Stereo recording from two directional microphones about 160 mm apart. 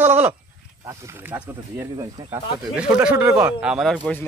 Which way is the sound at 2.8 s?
10° right (ahead or behind).